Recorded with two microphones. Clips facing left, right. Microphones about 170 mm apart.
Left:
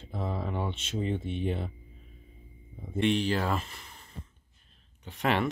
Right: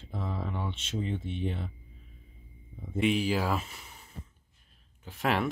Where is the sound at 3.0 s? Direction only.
5° right (ahead or behind).